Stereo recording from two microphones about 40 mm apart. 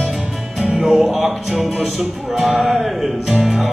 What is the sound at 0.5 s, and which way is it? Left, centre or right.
Music, centre.